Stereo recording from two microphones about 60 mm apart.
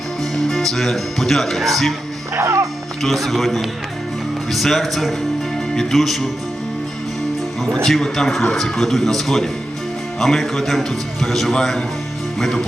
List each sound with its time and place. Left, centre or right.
0.3 s speech: centre
2.3 s speech: right
3.0 s speech: centre
7.9 s speech: centre